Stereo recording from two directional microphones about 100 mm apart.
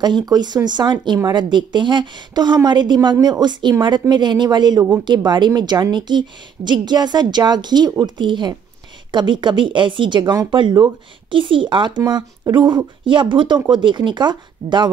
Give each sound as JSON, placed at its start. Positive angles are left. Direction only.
{"t": 0.0, "sound": "a woman's voice", "side_deg": -45}
{"t": 12.0, "sound": "a woman's voice", "side_deg": -45}